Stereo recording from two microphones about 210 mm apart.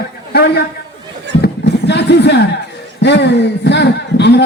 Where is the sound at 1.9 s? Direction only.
55° left (ahead or behind).